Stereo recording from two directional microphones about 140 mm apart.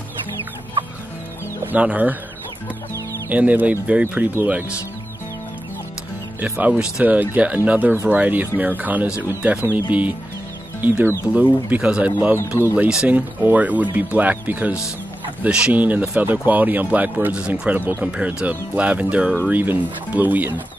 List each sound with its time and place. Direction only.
1.6 s speech: 10° right (ahead or behind)
3.3 s speech: 10° right (ahead or behind)
6.4 s speech: 10° right (ahead or behind)
10.8 s speech: 10° right (ahead or behind)
12.4 s speech: 20° left (ahead or behind)
12.7 s speech: 10° right (ahead or behind)